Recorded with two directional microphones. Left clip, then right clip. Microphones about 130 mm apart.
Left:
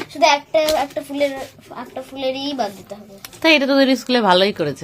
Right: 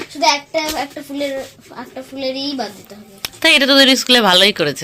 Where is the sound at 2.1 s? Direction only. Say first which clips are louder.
Right 1 dB; 55° left (ahead or behind).